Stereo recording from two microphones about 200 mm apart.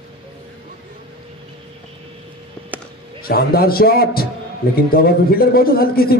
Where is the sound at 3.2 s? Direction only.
50° left (ahead or behind).